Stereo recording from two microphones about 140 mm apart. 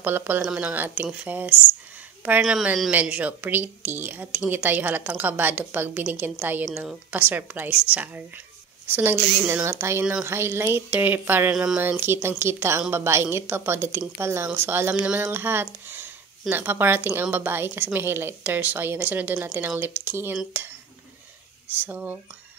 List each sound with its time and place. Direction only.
0.0 s a woman's voice: 15° right (ahead or behind)
11.5 s speech: 5° right (ahead or behind)
11.8 s a woman's voice: 15° right (ahead or behind)
21.8 s a woman's voice: 15° right (ahead or behind)